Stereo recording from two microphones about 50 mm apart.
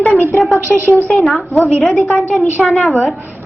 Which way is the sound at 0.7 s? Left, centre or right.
Right.